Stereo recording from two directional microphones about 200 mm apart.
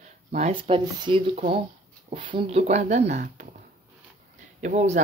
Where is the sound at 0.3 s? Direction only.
30° right (ahead or behind).